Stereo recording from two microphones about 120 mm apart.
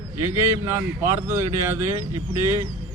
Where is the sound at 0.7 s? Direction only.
20° right (ahead or behind).